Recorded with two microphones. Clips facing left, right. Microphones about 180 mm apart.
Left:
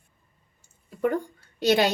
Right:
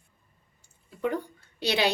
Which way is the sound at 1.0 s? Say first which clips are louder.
Left 4 dB; 50° left (ahead or behind).